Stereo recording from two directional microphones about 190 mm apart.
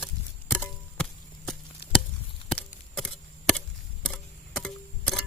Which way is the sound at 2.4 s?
30° left (ahead or behind).